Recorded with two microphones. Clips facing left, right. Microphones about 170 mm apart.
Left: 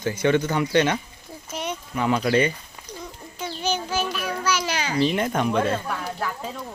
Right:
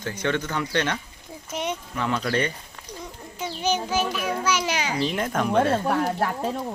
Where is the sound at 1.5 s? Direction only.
20° right (ahead or behind).